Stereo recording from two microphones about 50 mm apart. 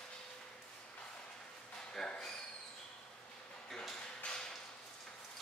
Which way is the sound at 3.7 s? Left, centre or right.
Centre.